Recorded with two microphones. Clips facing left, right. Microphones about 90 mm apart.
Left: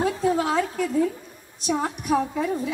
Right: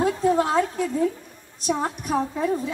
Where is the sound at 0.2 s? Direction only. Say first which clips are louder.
Right 2 dB; 35° right (ahead or behind).